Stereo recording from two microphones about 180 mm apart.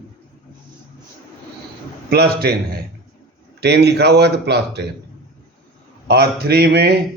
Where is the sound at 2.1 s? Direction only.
60° right (ahead or behind).